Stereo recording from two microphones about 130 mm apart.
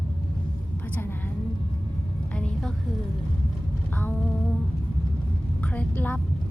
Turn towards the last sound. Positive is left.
turn(degrees=15)  # may be behind; listen again after turning